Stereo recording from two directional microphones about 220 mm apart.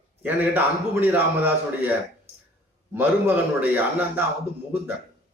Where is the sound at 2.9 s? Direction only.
10° right (ahead or behind).